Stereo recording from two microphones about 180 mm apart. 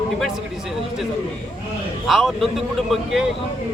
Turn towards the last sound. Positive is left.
turn(degrees=0)  # may be behind; listen again after turning